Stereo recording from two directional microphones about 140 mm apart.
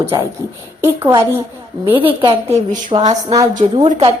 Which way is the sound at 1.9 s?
35° right (ahead or behind).